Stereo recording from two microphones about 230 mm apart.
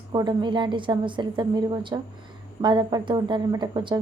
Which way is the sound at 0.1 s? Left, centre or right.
Centre.